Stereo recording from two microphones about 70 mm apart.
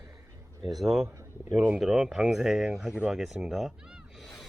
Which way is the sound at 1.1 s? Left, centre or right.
Right.